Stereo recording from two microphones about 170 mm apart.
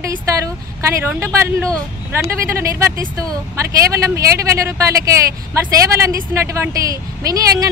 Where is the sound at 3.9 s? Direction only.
20° right (ahead or behind).